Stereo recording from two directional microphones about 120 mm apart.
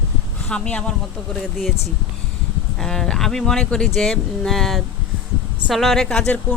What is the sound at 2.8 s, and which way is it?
A woman's voice, 5° left (ahead or behind).